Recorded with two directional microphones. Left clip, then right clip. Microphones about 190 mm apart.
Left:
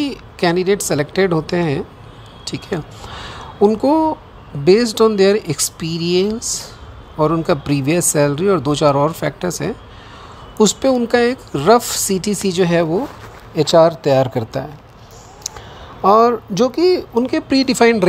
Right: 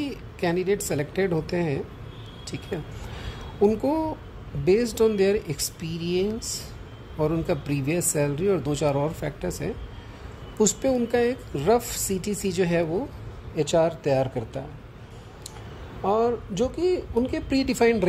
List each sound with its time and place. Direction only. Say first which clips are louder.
0.0 s a woman's voice: left 10 dB; 10° left (ahead or behind)
16.0 s speech: left 12 dB; 15° left (ahead or behind)